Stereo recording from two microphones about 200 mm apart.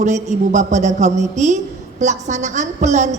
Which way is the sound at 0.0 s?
35° right (ahead or behind).